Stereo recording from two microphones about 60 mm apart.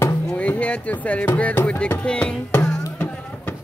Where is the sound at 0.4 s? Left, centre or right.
Left.